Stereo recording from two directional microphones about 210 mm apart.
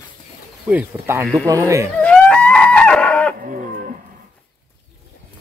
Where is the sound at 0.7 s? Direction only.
10° right (ahead or behind).